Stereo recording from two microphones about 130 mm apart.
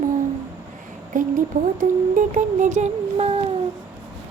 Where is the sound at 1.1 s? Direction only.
90° right.